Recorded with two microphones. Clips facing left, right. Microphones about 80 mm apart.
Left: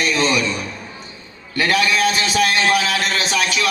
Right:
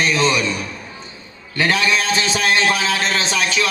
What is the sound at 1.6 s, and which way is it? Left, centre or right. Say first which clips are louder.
A man's voice: left 1 dB; right.